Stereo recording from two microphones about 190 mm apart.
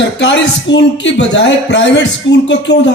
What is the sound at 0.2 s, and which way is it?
A man's voice, 70° left (ahead or behind).